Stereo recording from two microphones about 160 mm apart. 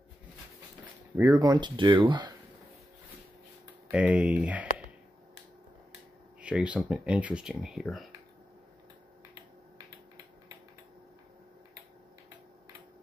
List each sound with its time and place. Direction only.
1.1 s speech: 20° right (ahead or behind)
3.9 s speech: 5° right (ahead or behind)
6.4 s speech: 5° right (ahead or behind)